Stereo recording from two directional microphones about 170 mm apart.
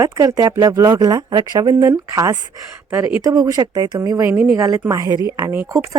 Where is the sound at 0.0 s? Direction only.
20° right (ahead or behind).